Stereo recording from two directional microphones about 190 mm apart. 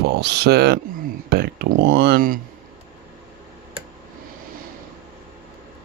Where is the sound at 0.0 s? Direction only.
60° right (ahead or behind).